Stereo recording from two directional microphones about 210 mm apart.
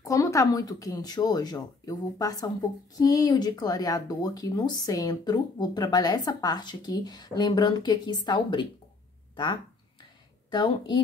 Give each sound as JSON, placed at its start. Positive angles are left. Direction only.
{"t": 0.0, "sound": "speech", "side_deg": 15}
{"t": 10.5, "sound": "speech", "side_deg": 20}